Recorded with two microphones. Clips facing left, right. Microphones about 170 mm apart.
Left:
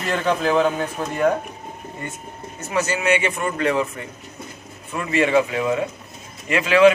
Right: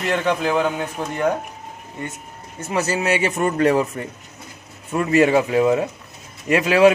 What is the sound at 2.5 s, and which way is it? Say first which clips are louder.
A man's voice: right 1 dB; 35° right (ahead or behind).